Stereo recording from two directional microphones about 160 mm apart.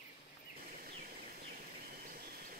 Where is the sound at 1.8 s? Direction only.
65° right (ahead or behind).